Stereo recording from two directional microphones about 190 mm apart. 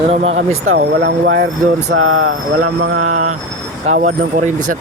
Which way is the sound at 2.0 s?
90° right.